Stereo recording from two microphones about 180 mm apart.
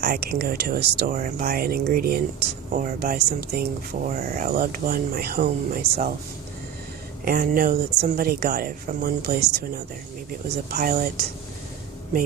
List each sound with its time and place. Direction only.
0.0 s speech: 60° right (ahead or behind)
7.3 s speech: 55° right (ahead or behind)